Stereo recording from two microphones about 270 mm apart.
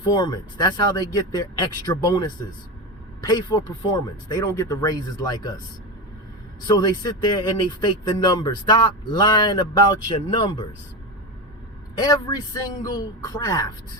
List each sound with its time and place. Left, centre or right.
0.0 s speech: centre
6.7 s speech: centre
11.9 s speech: centre